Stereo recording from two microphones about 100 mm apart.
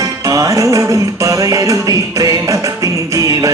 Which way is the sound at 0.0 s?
35° right (ahead or behind).